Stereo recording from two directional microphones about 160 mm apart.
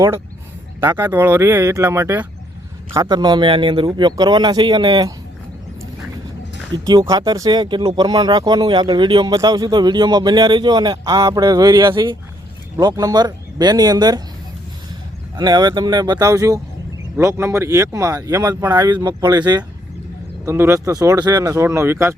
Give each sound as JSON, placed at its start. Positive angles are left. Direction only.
{"t": 0.8, "sound": "speech", "side_deg": -15}
{"t": 6.8, "sound": "speech", "side_deg": -25}
{"t": 15.4, "sound": "speech", "side_deg": -25}